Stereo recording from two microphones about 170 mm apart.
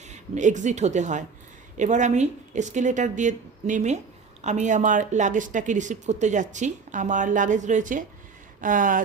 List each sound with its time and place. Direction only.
0.1 s speech: 45° right (ahead or behind)